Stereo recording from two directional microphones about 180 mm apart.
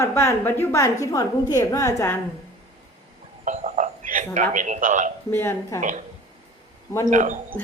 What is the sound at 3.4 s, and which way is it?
Speech, 45° right (ahead or behind).